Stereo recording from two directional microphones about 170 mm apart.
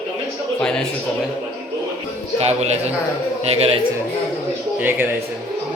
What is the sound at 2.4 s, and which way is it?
A man's voice, 40° right (ahead or behind).